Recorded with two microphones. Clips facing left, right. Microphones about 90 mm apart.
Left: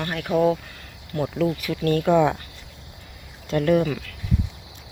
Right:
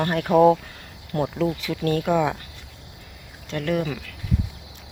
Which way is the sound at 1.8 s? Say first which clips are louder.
Left 3 dB; 10° right (ahead or behind).